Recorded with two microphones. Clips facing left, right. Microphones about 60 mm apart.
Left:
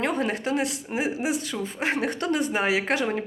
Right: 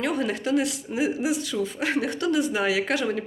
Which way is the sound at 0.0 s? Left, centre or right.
Left.